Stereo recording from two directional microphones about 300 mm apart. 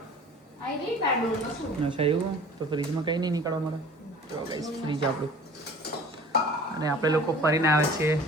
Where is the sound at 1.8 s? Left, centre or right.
Centre.